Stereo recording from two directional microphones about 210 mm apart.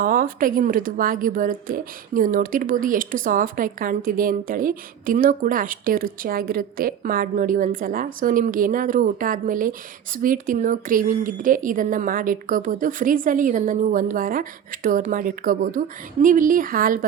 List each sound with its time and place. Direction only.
0.0 s a woman's voice: 40° right (ahead or behind)